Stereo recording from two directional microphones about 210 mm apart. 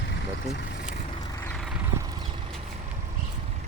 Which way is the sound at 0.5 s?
55° left (ahead or behind).